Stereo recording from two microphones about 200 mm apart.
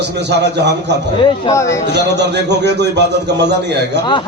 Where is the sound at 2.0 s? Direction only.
60° right (ahead or behind).